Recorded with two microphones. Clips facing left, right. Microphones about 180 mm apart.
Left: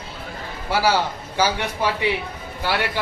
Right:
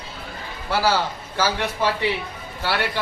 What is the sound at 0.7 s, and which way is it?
A man's voice, 15° left (ahead or behind).